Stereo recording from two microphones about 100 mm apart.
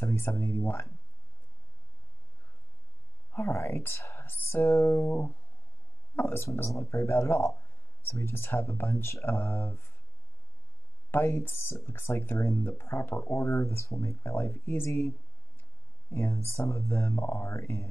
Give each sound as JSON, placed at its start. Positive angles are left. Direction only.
{"t": 0.0, "sound": "speech", "side_deg": 25}
{"t": 3.3, "sound": "speech", "side_deg": 25}
{"t": 11.1, "sound": "speech", "side_deg": 25}